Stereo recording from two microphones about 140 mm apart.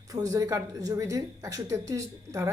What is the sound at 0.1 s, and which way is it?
Speech, 25° right (ahead or behind).